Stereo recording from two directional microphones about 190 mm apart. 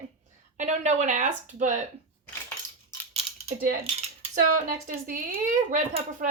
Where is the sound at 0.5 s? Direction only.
40° right (ahead or behind).